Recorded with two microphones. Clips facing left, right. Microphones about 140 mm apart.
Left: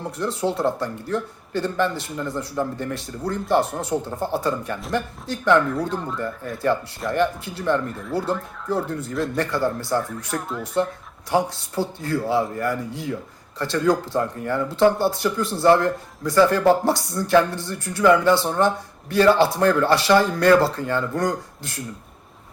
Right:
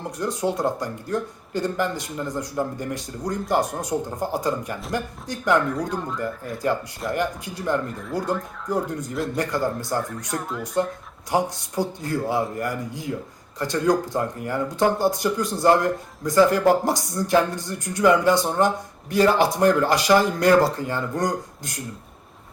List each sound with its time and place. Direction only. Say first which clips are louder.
0.2 s speech: left 1 dB; 15° right (ahead or behind)
7.2 s speech: left 8 dB; 15° right (ahead or behind)
7.9 s speech: left 2 dB; centre (ahead or behind)
8.7 s speech: left 1 dB; 15° right (ahead or behind)
10.0 s speech: even; centre (ahead or behind)
11.3 s speech: left 1 dB; 20° right (ahead or behind)